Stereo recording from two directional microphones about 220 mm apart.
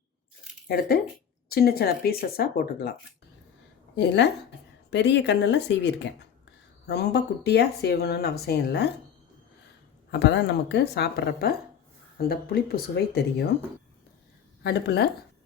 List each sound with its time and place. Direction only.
0.7 s speech: 45° left (ahead or behind)
3.9 s speech: 50° left (ahead or behind)
10.1 s speech: 50° left (ahead or behind)
14.6 s speech: 50° left (ahead or behind)